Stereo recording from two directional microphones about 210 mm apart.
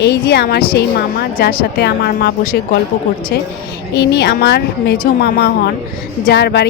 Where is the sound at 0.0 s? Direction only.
50° left (ahead or behind).